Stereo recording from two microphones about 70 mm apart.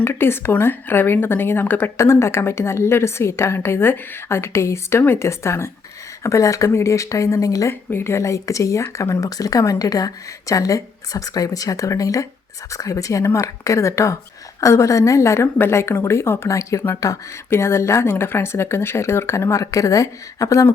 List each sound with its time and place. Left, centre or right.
0.0 s a woman's voice: left
2.0 s a woman's voice: left
7.7 s speech: left
9.3 s a woman's voice: left
17.5 s a woman's voice: left